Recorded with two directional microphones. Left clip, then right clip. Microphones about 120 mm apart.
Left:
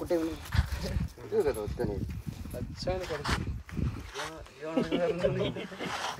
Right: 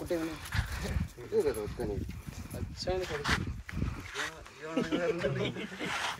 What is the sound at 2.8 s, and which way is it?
Speech, 45° left (ahead or behind).